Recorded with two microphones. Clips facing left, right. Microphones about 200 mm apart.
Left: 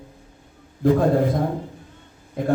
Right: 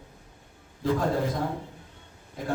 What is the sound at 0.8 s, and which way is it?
Speech, 55° left (ahead or behind).